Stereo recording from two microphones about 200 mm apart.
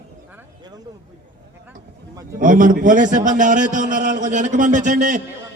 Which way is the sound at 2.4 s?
40° right (ahead or behind).